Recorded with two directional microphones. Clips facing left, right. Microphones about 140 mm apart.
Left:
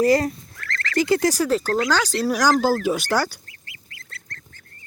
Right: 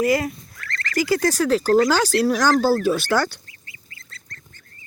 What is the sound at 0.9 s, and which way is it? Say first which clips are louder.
Speech: left 1 dB; 25° left (ahead or behind).